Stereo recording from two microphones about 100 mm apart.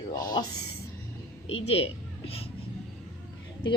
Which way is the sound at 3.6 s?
50° left (ahead or behind).